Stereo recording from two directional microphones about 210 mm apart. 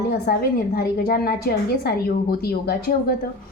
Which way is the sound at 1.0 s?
45° left (ahead or behind).